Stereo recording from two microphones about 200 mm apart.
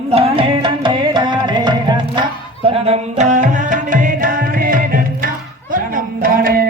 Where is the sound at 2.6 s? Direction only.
30° right (ahead or behind); by 5.3 s 45° right (ahead or behind).